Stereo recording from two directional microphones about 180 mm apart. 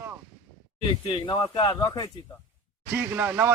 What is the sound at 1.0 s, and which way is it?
Speech, 25° left (ahead or behind).